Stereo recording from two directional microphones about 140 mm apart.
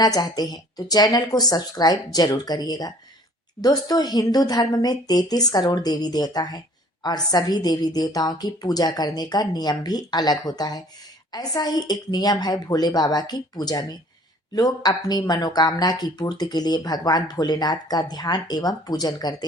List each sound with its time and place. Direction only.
0.0 s speech: 25° left (ahead or behind)